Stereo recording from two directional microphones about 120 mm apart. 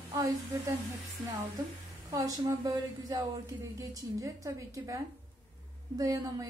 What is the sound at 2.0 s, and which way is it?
A woman's voice, 30° right (ahead or behind).